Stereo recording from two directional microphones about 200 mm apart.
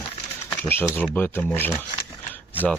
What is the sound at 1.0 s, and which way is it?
Speech, 10° left (ahead or behind).